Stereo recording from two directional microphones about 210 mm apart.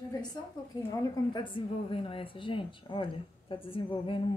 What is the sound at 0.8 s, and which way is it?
A woman's voice, 15° left (ahead or behind).